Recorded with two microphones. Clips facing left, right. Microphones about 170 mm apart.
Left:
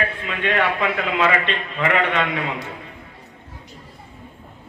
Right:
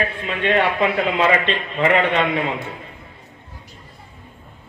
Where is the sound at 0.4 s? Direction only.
25° right (ahead or behind).